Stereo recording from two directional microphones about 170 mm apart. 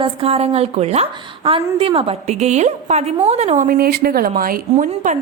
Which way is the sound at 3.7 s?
65° right (ahead or behind).